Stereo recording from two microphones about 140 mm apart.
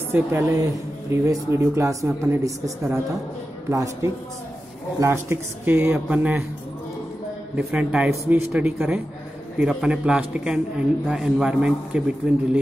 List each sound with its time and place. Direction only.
0.1 s a woman's voice: 20° right (ahead or behind)
7.5 s a man's voice: 5° right (ahead or behind)